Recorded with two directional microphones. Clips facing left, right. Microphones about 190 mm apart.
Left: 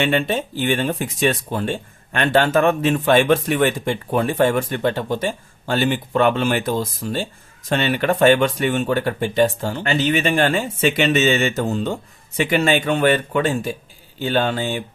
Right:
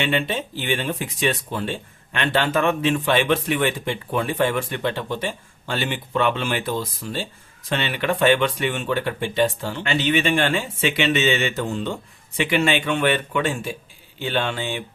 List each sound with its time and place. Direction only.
0.0 s speech: 45° left (ahead or behind)